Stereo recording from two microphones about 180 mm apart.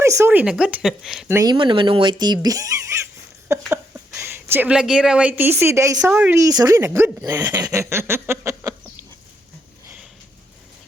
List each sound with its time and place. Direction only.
0.0 s speech: 15° right (ahead or behind)
1.3 s a woman's voice: 20° right (ahead or behind)
7.5 s a sound: 20° right (ahead or behind)
9.8 s sniff: 10° right (ahead or behind)